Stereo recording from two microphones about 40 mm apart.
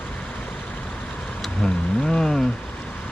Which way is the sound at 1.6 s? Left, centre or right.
Centre.